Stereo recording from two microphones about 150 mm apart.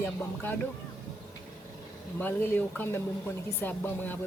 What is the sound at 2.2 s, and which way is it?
Speech, 15° left (ahead or behind).